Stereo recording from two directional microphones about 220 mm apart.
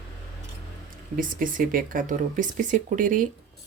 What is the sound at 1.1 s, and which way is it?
Speech, 40° right (ahead or behind).